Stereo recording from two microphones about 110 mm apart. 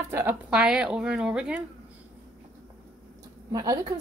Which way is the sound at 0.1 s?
20° right (ahead or behind).